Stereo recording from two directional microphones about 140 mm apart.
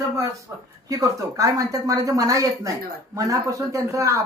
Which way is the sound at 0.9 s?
25° right (ahead or behind).